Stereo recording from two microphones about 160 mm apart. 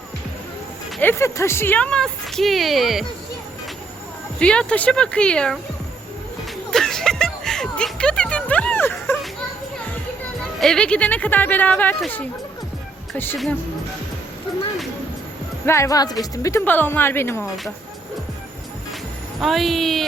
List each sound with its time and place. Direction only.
1.0 s speech: 15° left (ahead or behind); by 3.1 s centre (ahead or behind)
4.4 s speech: 5° left (ahead or behind)
6.7 s music: 5° left (ahead or behind)
10.6 s speech: 5° left (ahead or behind)
15.6 s speech: 15° left (ahead or behind)
19.4 s speech: centre (ahead or behind)